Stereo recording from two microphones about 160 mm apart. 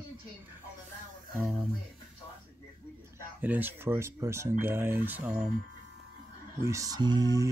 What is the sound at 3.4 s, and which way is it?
Speech, 10° right (ahead or behind).